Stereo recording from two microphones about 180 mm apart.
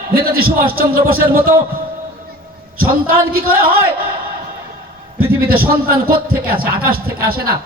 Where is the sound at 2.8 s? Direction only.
55° right (ahead or behind).